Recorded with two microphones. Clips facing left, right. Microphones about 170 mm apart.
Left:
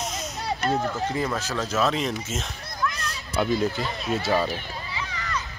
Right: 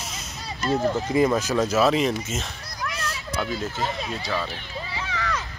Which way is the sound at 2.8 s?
65° right (ahead or behind).